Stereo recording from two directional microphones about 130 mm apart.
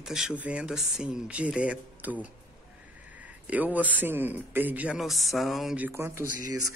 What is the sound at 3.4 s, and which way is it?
Speech, 10° right (ahead or behind).